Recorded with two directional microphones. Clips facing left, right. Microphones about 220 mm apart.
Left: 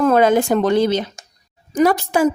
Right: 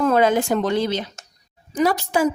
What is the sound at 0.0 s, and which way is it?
Speech, 50° left (ahead or behind).